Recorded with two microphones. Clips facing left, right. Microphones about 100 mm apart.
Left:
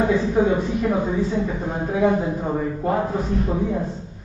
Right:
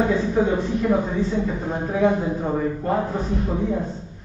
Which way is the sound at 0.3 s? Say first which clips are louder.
Left 1 dB; 15° left (ahead or behind).